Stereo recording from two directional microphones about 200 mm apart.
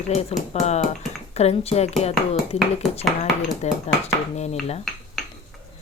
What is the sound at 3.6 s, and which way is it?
Dishes, 35° left (ahead or behind).